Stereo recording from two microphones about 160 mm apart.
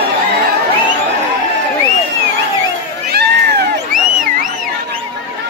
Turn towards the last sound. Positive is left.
turn(degrees=-60)  # may be behind; listen again after turning